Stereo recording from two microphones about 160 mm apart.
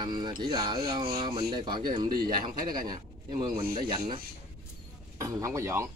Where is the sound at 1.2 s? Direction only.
30° right (ahead or behind).